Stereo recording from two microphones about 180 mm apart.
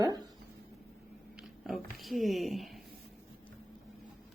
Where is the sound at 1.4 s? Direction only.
Centre (ahead or behind).